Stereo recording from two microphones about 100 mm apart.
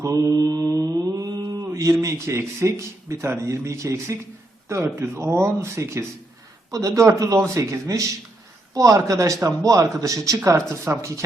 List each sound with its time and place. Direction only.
0.0 s mantra: 35° right (ahead or behind)
1.6 s speech: 30° right (ahead or behind)